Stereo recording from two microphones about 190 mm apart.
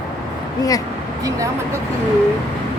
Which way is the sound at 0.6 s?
20° left (ahead or behind).